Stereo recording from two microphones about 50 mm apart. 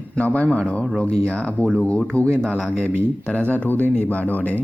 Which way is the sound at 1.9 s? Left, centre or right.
Left.